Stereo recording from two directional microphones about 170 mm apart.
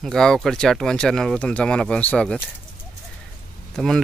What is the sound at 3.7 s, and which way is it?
Speech, 5° left (ahead or behind).